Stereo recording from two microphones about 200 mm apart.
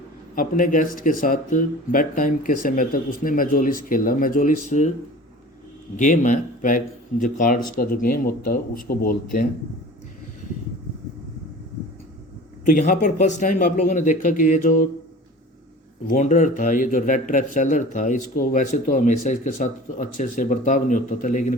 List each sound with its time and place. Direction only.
0.3 s speech: 45° left (ahead or behind)
6.0 s speech: 40° left (ahead or behind)
12.6 s speech: 40° left (ahead or behind)
16.0 s speech: 40° left (ahead or behind)